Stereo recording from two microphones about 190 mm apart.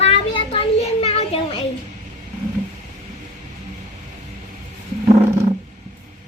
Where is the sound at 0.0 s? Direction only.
30° left (ahead or behind).